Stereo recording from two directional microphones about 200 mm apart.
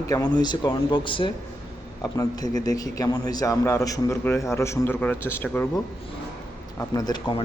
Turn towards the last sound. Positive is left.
turn(degrees=20)  # may be behind; listen again after turning